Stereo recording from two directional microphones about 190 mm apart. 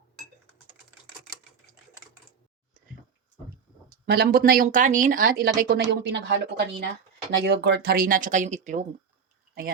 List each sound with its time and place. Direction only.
4.0 s speech: 55° right (ahead or behind)